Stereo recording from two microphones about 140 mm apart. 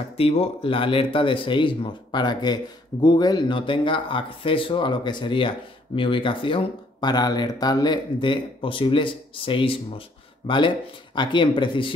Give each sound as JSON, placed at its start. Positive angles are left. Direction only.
{"t": 0.2, "sound": "speech", "side_deg": 45}